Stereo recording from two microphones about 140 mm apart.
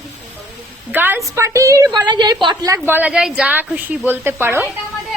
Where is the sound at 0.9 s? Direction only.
15° right (ahead or behind).